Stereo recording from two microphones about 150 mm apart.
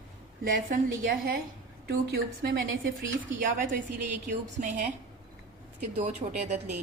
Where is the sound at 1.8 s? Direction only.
90° right.